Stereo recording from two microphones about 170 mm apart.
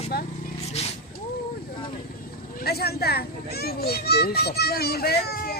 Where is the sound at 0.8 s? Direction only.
40° left (ahead or behind).